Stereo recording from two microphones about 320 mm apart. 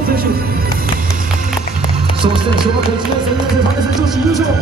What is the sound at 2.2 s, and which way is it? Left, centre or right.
Music, centre.